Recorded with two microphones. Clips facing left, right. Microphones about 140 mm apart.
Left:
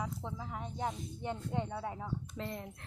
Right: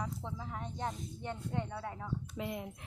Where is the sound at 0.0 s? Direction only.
5° left (ahead or behind).